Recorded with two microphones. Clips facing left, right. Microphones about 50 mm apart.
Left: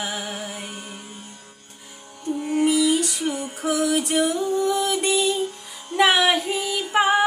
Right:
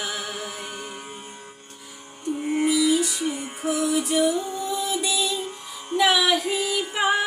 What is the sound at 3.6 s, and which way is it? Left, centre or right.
Music, left.